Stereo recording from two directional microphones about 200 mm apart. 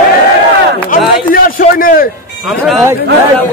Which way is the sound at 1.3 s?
45° left (ahead or behind).